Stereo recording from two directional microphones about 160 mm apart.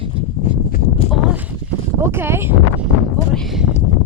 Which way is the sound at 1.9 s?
15° right (ahead or behind).